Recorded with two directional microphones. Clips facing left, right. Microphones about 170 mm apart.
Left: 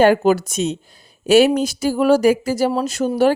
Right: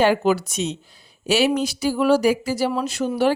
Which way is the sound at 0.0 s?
50° left (ahead or behind).